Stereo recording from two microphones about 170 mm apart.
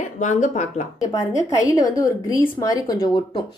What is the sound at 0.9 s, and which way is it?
A woman's voice, 20° left (ahead or behind).